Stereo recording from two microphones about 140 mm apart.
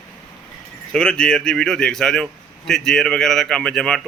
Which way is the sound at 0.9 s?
5° left (ahead or behind).